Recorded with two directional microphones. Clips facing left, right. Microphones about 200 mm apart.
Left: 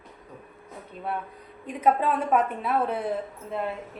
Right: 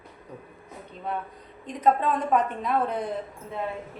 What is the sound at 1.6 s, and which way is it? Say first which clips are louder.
A woman's voice: even; 10° left (ahead or behind).